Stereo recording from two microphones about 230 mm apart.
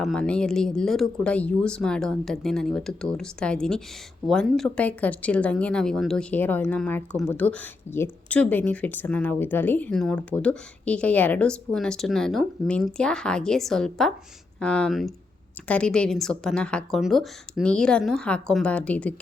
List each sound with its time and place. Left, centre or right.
0.0 s speech: centre